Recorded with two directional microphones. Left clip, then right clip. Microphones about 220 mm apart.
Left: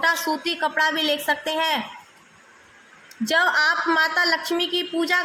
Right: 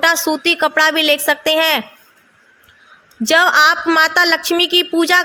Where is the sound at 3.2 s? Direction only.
35° right (ahead or behind).